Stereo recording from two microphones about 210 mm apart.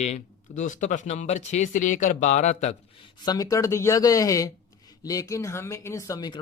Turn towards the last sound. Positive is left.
turn(degrees=15)  # may be behind; listen again after turning